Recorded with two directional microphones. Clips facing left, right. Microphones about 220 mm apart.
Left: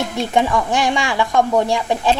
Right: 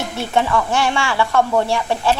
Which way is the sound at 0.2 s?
15° left (ahead or behind).